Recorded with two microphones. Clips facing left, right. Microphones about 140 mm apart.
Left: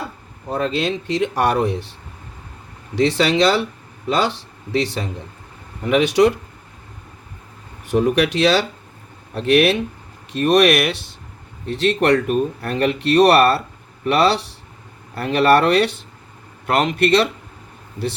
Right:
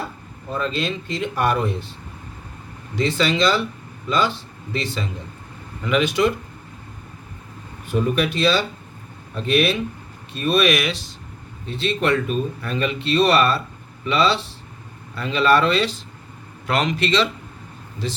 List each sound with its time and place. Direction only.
0.5 s speech: 65° left (ahead or behind)
2.9 s speech: 70° left (ahead or behind)
7.9 s speech: 70° left (ahead or behind)
11.6 s speech: 70° left (ahead or behind)
16.6 s speech: 55° left (ahead or behind)